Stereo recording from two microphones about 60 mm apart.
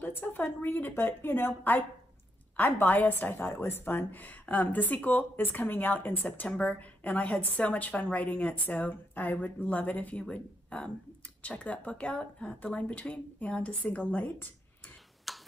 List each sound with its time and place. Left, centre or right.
0.2 s a woman's voice: left
15.3 s tick-tock: centre